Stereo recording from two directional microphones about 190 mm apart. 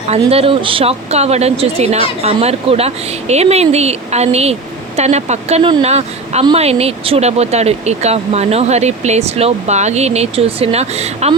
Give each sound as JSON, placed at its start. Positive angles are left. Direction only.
{"t": 0.1, "sound": "speech", "side_deg": -30}